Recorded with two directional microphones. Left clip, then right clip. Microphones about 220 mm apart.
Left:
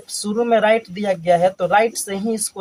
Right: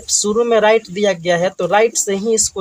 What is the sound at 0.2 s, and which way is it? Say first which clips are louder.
Speech: right 3 dB; 45° right (ahead or behind).